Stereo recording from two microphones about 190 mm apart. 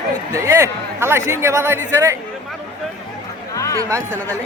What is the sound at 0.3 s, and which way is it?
Speech, 15° right (ahead or behind).